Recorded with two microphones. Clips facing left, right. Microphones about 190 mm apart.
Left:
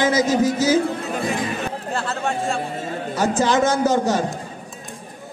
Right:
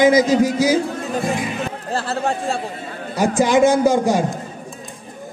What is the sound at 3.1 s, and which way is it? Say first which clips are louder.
A man's voice: right 4 dB; 10° right (ahead or behind).